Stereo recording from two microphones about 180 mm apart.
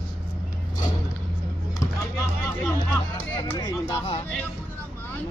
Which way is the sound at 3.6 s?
20° left (ahead or behind).